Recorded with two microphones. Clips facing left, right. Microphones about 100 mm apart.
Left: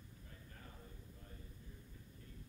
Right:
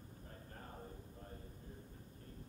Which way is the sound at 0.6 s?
40° right (ahead or behind).